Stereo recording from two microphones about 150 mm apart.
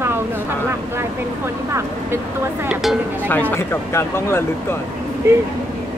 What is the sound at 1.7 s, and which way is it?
Speech, 15° right (ahead or behind).